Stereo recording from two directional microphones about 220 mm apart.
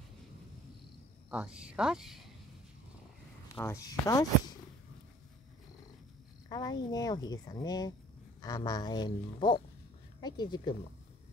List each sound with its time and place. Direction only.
1.3 s speech: 5° right (ahead or behind)
3.5 s speech: 15° left (ahead or behind)
6.5 s speech: 20° left (ahead or behind)